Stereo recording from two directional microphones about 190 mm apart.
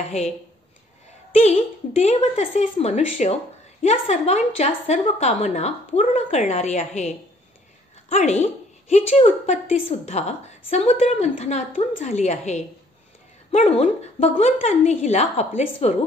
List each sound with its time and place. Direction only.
1.3 s a woman's voice: 35° left (ahead or behind)